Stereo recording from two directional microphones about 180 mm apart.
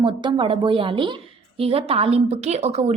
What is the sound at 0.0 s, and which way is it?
A woman's voice, 25° right (ahead or behind).